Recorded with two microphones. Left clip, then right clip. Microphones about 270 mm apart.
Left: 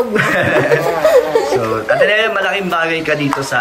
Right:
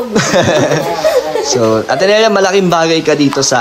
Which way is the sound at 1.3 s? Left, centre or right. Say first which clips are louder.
Left 1 dB; centre.